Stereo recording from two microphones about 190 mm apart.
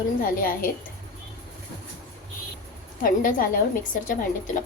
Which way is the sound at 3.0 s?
45° left (ahead or behind).